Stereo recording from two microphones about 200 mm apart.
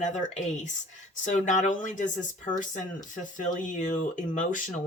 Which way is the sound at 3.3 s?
40° left (ahead or behind).